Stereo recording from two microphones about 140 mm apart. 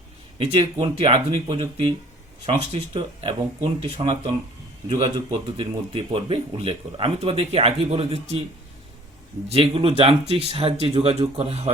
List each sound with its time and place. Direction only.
0.3 s speech: 40° right (ahead or behind)
4.9 s speech: 35° right (ahead or behind)
9.5 s speech: 40° right (ahead or behind)